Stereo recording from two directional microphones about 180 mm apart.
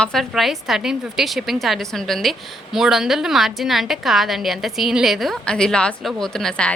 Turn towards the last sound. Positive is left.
turn(degrees=5)  # may be behind; listen again after turning